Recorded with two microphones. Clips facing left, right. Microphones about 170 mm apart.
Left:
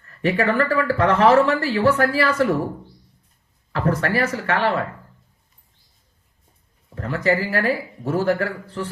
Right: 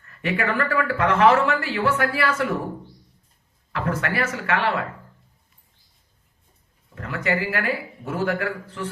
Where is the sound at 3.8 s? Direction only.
35° left (ahead or behind).